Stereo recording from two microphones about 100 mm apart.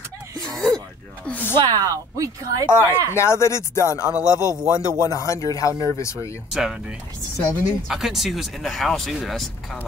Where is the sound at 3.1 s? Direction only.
30° left (ahead or behind).